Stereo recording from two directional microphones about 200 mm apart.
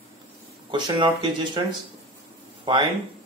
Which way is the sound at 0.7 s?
20° right (ahead or behind).